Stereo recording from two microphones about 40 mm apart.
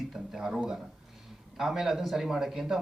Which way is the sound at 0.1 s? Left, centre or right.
Centre.